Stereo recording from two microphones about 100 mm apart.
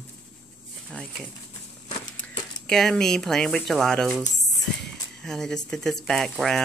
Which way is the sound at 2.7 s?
5° left (ahead or behind).